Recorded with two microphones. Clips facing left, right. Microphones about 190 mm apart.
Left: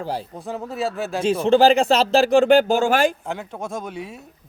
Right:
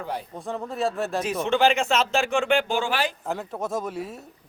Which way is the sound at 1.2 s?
30° left (ahead or behind).